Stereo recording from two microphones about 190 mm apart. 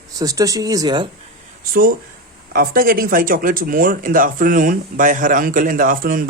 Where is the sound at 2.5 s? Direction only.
50° right (ahead or behind).